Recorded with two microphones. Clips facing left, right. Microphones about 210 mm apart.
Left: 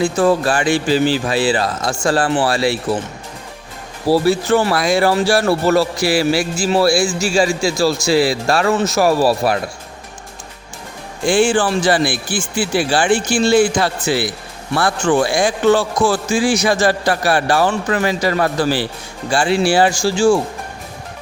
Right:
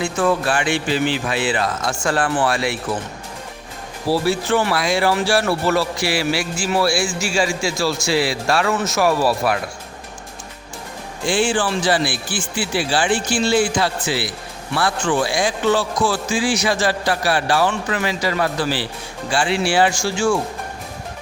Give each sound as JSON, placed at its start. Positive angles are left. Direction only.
{"t": 0.0, "sound": "speech", "side_deg": 35}
{"t": 4.1, "sound": "speech", "side_deg": 40}
{"t": 11.3, "sound": "speech", "side_deg": 50}